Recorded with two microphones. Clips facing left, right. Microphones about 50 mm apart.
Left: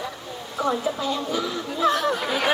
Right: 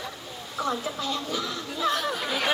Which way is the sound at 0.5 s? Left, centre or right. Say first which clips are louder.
Left 5 dB; centre.